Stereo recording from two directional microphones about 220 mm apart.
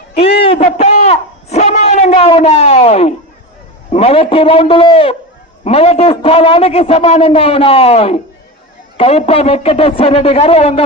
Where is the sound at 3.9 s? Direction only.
25° left (ahead or behind).